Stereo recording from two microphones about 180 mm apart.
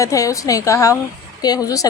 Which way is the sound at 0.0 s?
20° left (ahead or behind).